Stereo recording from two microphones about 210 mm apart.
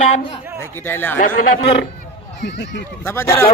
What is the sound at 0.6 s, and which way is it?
Speech, 10° left (ahead or behind).